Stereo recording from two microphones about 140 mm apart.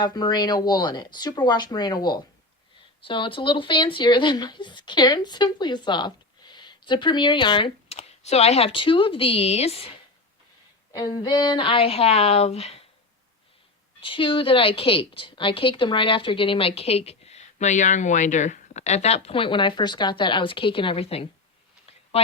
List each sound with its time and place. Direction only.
0.0 s a woman's voice: 30° left (ahead or behind)
10.9 s a woman's voice: 30° left (ahead or behind); by 12.8 s 45° left (ahead or behind)
14.0 s a woman's voice: 40° left (ahead or behind)